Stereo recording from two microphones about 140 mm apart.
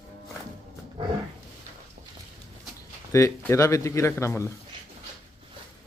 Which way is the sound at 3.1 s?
20° left (ahead or behind).